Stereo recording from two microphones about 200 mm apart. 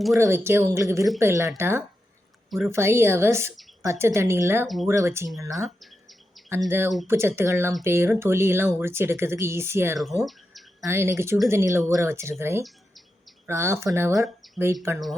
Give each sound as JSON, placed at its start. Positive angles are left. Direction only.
{"t": 0.2, "sound": "speech", "side_deg": -15}
{"t": 5.6, "sound": "bird", "side_deg": 0}
{"t": 6.7, "sound": "speech", "side_deg": -10}